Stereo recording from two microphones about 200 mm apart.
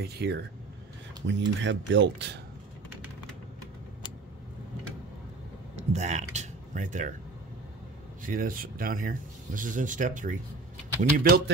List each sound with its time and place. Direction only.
0.0 s speech: 55° right (ahead or behind)
1.5 s speech: 65° right (ahead or behind)
5.8 s a sound: 35° right (ahead or behind)
6.3 s speech: 35° right (ahead or behind)
8.2 s speech: 45° right (ahead or behind)